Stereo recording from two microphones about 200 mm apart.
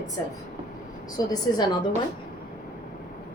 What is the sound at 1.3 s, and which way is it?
Speech, 20° left (ahead or behind).